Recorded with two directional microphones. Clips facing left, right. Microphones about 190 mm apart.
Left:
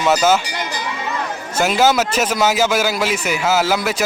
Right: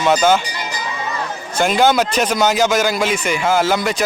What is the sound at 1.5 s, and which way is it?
Speech, 5° left (ahead or behind).